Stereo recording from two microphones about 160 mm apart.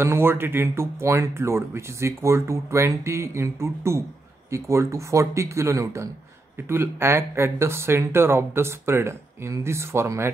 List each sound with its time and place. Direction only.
0.0 s speech: 15° right (ahead or behind)